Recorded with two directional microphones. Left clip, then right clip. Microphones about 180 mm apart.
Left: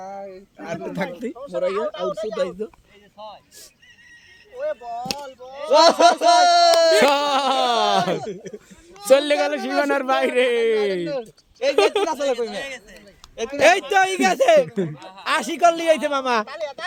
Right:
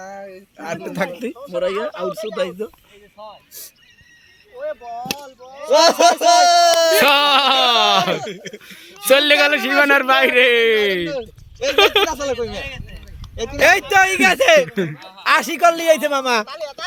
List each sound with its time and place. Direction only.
0.0 s a sound: 45° right (ahead or behind)
0.9 s speech: 30° right (ahead or behind)
4.5 s speech: 25° right (ahead or behind)
5.6 s speech: 40° right (ahead or behind)
7.0 s a sound: 5° left (ahead or behind)
8.5 s speech: 5° right (ahead or behind)
9.0 s a man's voice: 5° left (ahead or behind)
12.6 s a sound: centre (ahead or behind)
13.3 s speech: 35° right (ahead or behind)
13.6 s speech: 20° right (ahead or behind); by 14.9 s 5° right (ahead or behind)
15.2 s speech: 25° right (ahead or behind); by 16.8 s 50° right (ahead or behind)